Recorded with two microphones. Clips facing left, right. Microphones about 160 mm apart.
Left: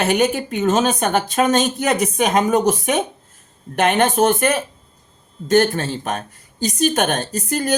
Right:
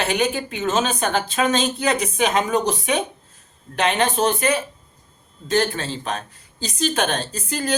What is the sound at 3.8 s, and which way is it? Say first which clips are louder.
Speech: left 4 dB; 50° left (ahead or behind).